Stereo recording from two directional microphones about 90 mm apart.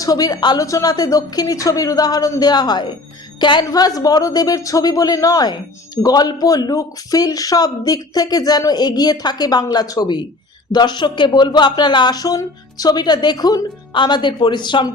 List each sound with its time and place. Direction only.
0.0 s speech: 45° left (ahead or behind)
3.7 s speech: 45° left (ahead or behind)